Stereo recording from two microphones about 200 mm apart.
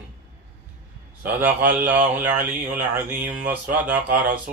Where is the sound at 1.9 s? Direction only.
10° right (ahead or behind).